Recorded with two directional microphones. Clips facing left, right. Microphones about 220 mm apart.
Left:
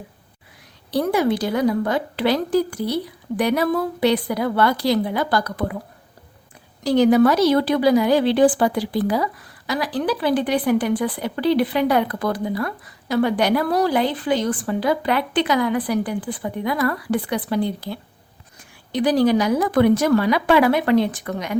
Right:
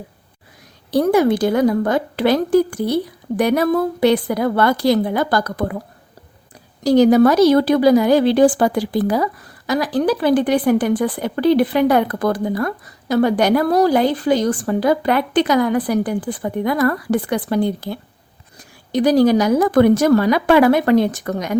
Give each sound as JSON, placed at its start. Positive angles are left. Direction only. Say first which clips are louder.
{"t": 0.9, "sound": "a woman's voice", "louder": "right 5 dB", "side_deg": -45}
{"t": 6.8, "sound": "a woman's voice", "louder": "right 3 dB", "side_deg": -40}